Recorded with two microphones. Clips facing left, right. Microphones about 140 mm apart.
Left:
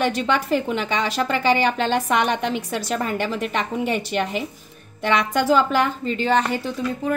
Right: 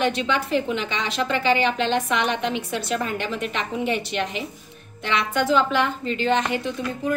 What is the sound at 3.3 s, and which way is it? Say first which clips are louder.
A woman's voice: left 3 dB; 45° left (ahead or behind).